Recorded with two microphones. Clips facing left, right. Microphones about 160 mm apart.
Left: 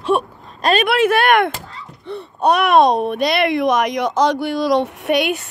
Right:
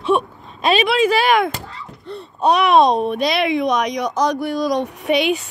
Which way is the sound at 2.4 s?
Centre (ahead or behind).